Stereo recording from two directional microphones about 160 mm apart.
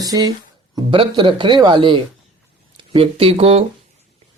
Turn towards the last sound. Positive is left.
turn(degrees=-40)  # may be behind; listen again after turning